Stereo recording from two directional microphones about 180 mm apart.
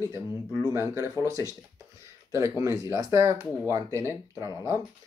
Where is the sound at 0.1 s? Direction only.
20° right (ahead or behind).